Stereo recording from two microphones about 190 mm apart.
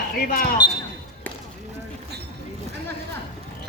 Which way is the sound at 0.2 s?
50° left (ahead or behind).